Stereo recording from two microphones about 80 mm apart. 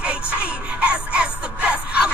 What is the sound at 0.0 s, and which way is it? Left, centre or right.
Music, centre.